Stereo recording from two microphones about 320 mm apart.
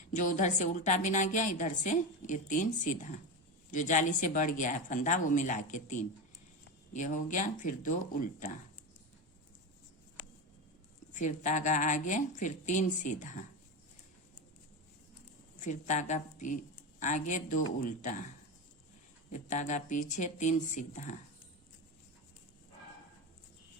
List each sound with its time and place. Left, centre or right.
0.1 s a woman's voice: left
11.1 s a woman's voice: left
15.6 s a woman's voice: left
19.3 s a woman's voice: left